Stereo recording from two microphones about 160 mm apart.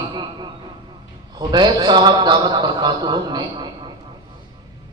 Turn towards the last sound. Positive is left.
turn(degrees=-25)  # may be behind; listen again after turning